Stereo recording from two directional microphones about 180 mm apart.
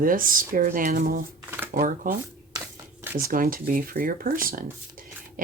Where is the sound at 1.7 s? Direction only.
50° right (ahead or behind).